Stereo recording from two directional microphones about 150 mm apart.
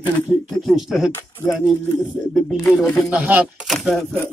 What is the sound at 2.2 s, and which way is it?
Speech, 5° left (ahead or behind).